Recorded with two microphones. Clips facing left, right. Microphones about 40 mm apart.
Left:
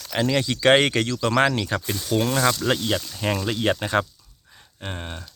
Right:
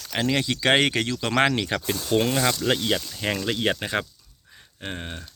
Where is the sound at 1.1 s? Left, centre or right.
Right.